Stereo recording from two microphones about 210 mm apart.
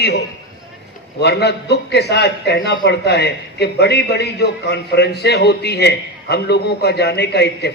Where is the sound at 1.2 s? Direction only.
50° left (ahead or behind).